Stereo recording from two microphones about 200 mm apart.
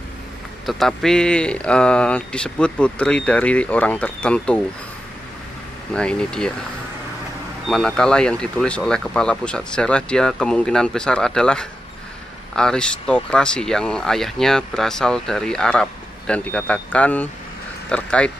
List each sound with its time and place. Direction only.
0.7 s speech: centre (ahead or behind)
5.9 s speech: 5° left (ahead or behind)
7.6 s speech: 5° left (ahead or behind)